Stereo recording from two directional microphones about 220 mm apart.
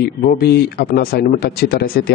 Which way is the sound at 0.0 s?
45° left (ahead or behind).